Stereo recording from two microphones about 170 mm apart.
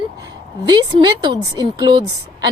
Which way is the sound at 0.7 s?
30° right (ahead or behind).